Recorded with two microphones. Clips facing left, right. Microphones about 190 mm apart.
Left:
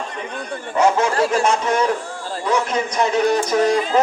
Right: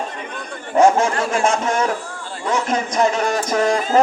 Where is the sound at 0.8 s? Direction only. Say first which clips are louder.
Right 2 dB; 50° right (ahead or behind).